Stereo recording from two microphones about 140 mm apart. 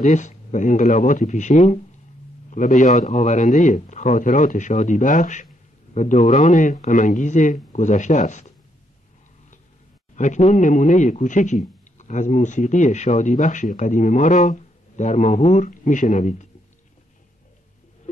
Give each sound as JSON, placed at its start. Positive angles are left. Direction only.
{"t": 0.0, "sound": "a man's voice", "side_deg": 55}
{"t": 10.1, "sound": "a man's voice", "side_deg": 60}
{"t": 15.6, "sound": "a man's voice", "side_deg": 70}